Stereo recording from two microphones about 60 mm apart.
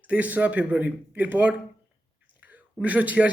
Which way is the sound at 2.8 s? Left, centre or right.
Right.